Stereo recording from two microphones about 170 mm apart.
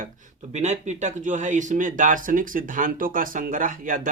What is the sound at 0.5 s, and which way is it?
Speech, 40° right (ahead or behind).